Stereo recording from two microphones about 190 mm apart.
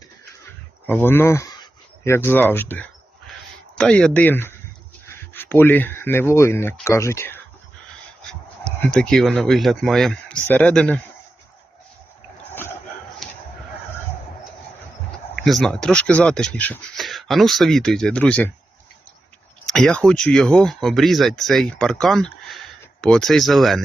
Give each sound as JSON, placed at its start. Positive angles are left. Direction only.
{"t": 0.9, "sound": "speech", "side_deg": 10}
{"t": 13.2, "sound": "a sound", "side_deg": 0}
{"t": 15.4, "sound": "speech", "side_deg": 0}
{"t": 19.6, "sound": "speech", "side_deg": 0}